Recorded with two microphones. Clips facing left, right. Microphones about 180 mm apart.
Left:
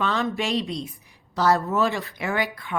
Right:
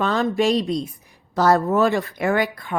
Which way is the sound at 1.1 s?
50° right (ahead or behind).